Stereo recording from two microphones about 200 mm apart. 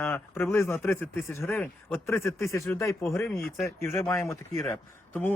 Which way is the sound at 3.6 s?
10° left (ahead or behind).